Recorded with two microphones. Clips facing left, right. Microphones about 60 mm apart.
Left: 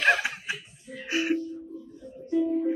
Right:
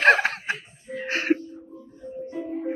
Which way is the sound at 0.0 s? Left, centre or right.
Right.